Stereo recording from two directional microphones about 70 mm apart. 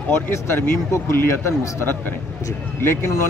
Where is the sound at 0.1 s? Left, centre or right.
Left.